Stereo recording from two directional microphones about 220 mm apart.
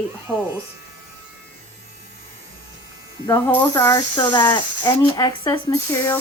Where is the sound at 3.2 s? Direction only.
15° left (ahead or behind).